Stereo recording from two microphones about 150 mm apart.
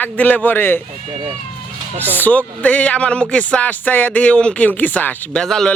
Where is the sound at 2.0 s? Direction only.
10° left (ahead or behind).